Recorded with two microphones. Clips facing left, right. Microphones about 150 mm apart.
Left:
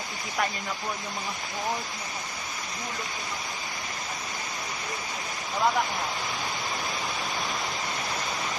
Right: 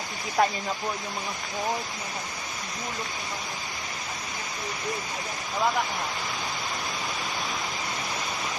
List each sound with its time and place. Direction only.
0.4 s speech: 30° right (ahead or behind)